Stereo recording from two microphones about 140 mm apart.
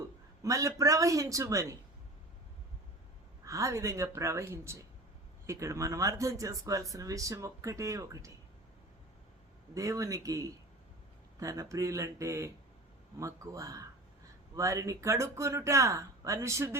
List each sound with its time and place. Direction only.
0.4 s speech: 25° right (ahead or behind)
3.4 s speech: 20° right (ahead or behind)
9.7 s speech: 25° right (ahead or behind)